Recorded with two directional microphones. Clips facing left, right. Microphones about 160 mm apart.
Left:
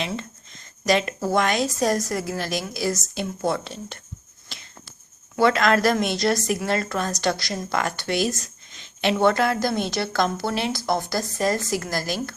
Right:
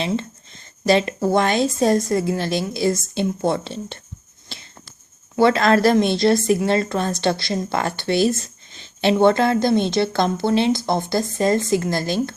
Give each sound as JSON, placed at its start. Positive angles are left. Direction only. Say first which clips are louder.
{"t": 0.0, "sound": "a woman's voice", "louder": "right 6 dB", "side_deg": -30}
{"t": 4.5, "sound": "a sound", "louder": "right 4 dB", "side_deg": -30}
{"t": 5.4, "sound": "a woman's voice", "louder": "right 4 dB", "side_deg": -30}